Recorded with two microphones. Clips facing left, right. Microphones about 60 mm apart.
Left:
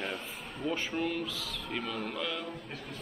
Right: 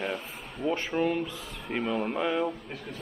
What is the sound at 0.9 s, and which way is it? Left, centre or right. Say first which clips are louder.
Speech: right 6 dB; centre.